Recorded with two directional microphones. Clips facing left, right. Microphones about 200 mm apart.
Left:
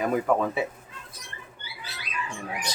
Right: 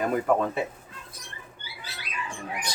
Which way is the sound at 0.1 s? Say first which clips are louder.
Even; centre (ahead or behind).